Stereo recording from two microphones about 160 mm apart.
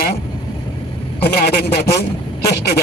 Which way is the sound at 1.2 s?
80° left.